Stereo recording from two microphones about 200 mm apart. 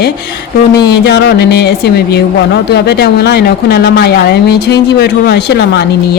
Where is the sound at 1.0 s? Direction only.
55° left (ahead or behind).